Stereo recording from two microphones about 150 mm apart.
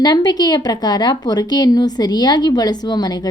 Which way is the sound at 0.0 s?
25° left (ahead or behind).